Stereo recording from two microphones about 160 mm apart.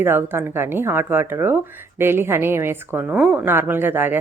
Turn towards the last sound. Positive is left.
turn(degrees=-15)  # may be behind; listen again after turning